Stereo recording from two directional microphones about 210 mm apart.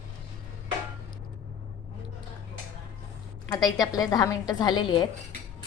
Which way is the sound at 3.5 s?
20° left (ahead or behind).